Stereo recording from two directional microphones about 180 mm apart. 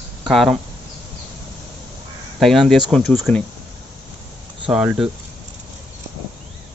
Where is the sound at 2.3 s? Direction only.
Centre (ahead or behind).